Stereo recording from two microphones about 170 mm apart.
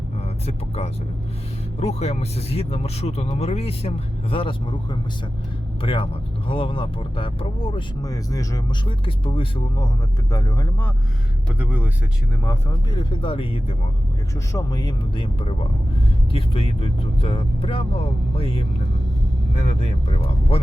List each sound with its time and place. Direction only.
1.8 s speech: 40° left (ahead or behind); by 10.8 s 20° left (ahead or behind)
11.6 s speech: 10° right (ahead or behind)
12.5 s speech: 20° left (ahead or behind)
14.3 s speech: 20° left (ahead or behind)